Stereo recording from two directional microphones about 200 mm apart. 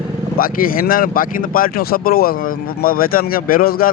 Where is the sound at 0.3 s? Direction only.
45° left (ahead or behind).